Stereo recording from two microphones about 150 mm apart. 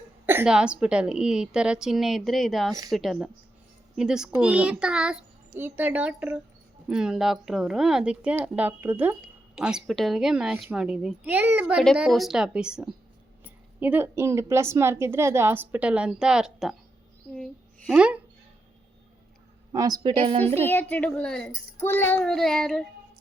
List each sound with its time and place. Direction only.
0.3 s a woman's voice: 10° right (ahead or behind)
11.8 s a woman's voice: centre (ahead or behind)
17.3 s a sound: 5° left (ahead or behind)
17.9 s a woman's voice: 5° right (ahead or behind)
19.7 s a woman's voice: 25° right (ahead or behind)
20.9 s a woman's voice: 10° left (ahead or behind)
21.8 s a woman's voice: 15° left (ahead or behind)